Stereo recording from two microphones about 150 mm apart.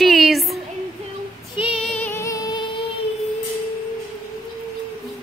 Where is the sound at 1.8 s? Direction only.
10° left (ahead or behind); by 2.8 s 30° left (ahead or behind).